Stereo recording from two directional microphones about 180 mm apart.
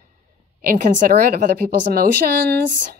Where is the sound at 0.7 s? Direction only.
50° right (ahead or behind).